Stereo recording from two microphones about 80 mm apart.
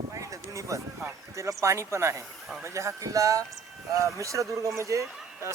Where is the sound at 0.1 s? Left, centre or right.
Right.